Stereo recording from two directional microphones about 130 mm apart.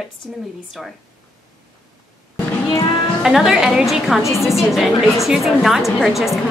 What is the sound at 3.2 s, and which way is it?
A woman's voice, centre (ahead or behind).